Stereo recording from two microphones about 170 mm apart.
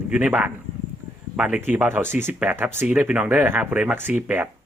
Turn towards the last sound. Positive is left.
turn(degrees=-10)  # may be behind; listen again after turning